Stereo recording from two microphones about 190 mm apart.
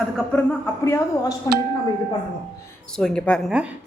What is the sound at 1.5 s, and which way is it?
Speech, 20° left (ahead or behind).